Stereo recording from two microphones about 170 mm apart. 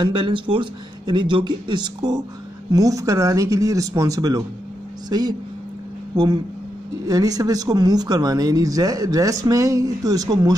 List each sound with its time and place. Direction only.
0.0 s speech: 30° right (ahead or behind)